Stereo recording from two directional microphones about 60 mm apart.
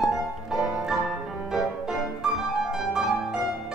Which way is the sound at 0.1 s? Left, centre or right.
Centre.